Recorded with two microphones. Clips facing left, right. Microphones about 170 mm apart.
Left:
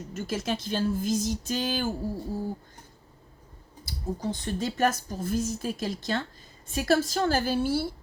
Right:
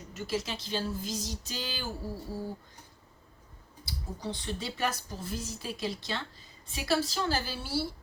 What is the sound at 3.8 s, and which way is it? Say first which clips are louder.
Speech: left 7 dB; 45° left (ahead or behind).